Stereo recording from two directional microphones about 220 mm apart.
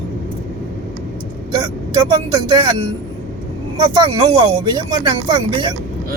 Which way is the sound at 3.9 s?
20° right (ahead or behind).